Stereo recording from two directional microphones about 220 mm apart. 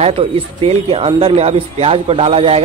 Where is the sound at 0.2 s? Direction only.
25° right (ahead or behind).